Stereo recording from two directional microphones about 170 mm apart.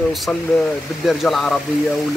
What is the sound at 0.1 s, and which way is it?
Speech, centre (ahead or behind).